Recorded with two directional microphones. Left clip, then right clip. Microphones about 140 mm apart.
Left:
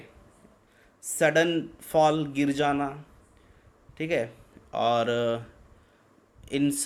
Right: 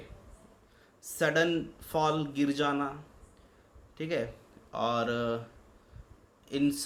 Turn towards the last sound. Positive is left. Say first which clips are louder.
# left 3 dB
turn(degrees=40)  # may be behind; listen again after turning